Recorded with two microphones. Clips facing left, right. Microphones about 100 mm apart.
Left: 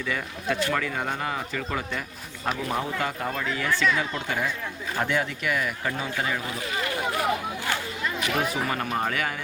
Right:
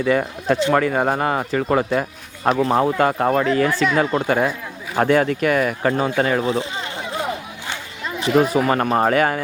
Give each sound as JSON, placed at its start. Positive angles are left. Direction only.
{"t": 0.0, "sound": "speech", "side_deg": -50}
{"t": 6.4, "sound": "a sound", "side_deg": -25}
{"t": 8.5, "sound": "speech", "side_deg": -50}